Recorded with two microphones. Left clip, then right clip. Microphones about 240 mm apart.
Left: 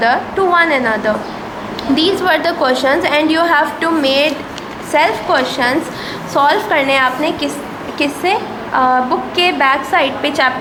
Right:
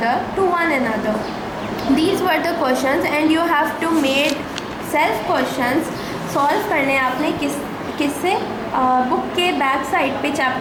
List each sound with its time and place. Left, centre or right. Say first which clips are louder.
0.0 s a woman's voice: left 5 dB; centre
2.1 s a woman's voice: left 4 dB; left